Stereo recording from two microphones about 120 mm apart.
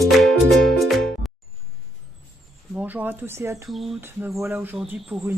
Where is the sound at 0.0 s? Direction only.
Centre (ahead or behind).